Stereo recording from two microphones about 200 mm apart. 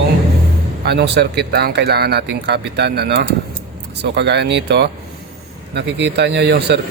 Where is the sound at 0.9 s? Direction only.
55° right (ahead or behind).